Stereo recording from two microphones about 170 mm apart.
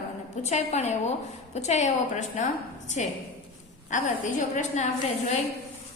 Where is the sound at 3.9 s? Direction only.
45° left (ahead or behind).